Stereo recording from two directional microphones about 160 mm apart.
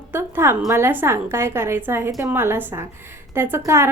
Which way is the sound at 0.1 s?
15° right (ahead or behind).